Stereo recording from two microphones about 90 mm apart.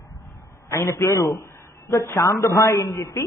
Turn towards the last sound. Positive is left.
turn(degrees=30)  # may be behind; listen again after turning